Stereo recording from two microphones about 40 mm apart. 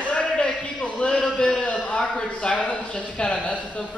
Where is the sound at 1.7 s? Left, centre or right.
Left.